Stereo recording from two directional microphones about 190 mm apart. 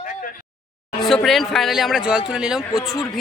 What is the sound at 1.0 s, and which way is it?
Speech, centre (ahead or behind).